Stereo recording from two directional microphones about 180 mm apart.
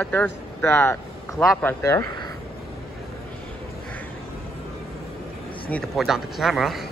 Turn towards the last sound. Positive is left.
turn(degrees=0)  # may be behind; listen again after turning